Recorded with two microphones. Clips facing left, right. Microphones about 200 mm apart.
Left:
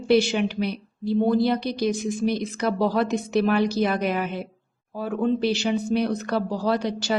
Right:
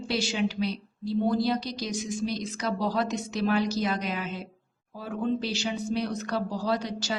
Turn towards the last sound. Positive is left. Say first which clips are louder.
# left 5 dB
turn(degrees=60)  # may be behind; listen again after turning